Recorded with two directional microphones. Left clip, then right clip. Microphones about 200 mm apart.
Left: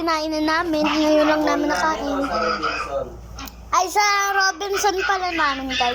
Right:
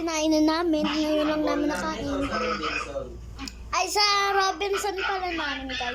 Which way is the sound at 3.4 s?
5° right (ahead or behind).